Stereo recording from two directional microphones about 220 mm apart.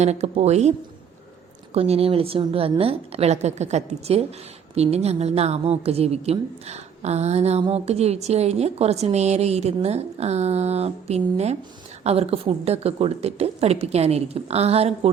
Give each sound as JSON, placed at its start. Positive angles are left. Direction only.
{"t": 0.0, "sound": "speech", "side_deg": -30}
{"t": 1.7, "sound": "a woman's voice", "side_deg": -25}